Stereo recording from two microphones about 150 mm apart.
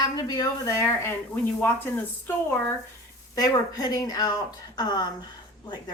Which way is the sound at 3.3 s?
25° left (ahead or behind).